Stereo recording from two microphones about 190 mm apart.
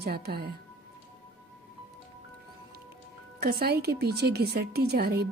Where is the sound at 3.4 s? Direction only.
55° right (ahead or behind).